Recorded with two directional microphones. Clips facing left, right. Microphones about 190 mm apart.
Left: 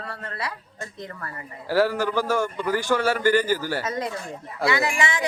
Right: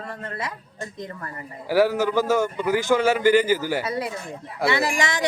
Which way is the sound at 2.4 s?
10° right (ahead or behind).